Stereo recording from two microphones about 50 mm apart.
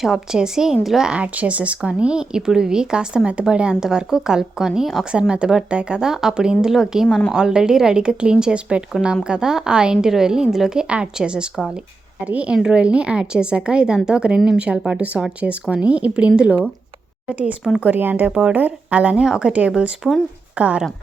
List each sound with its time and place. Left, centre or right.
0.0 s speech: centre
1.1 s a woman's voice: right
12.2 s a woman's voice: right
17.7 s a woman's voice: right
18.0 s speech: right
18.3 s a woman's voice: right
19.2 s a woman's voice: centre